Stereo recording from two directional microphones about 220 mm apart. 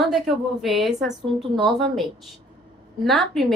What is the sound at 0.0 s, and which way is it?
A woman's voice, centre (ahead or behind).